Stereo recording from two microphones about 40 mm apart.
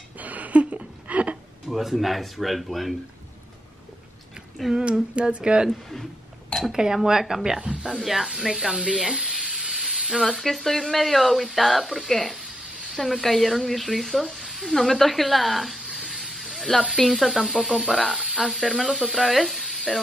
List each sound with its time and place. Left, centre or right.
0.2 s a sound: right
1.7 s speech: centre
4.7 s humming: right
6.5 s a sound: centre
6.8 s a woman's voice: centre
7.6 s speech: right
8.0 s speech: centre; by 9.7 s right
9.8 s a sound: centre
10.2 s speech: centre
14.3 s a sound: centre
17.1 s speech: centre
18.1 s speech: centre
18.5 s speech: centre